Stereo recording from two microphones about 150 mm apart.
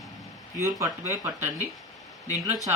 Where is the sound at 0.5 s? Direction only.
15° right (ahead or behind).